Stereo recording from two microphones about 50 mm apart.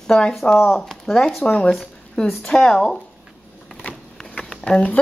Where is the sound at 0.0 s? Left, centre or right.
Centre.